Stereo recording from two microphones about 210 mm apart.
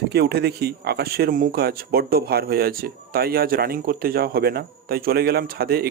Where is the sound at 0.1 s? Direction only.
50° right (ahead or behind).